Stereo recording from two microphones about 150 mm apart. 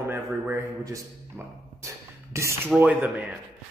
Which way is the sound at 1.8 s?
20° right (ahead or behind).